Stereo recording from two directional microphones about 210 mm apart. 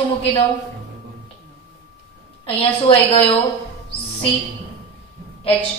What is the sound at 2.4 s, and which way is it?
Speech, 25° left (ahead or behind).